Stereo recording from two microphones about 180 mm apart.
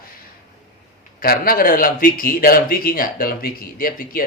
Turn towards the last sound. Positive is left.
turn(degrees=55)  # may be behind; listen again after turning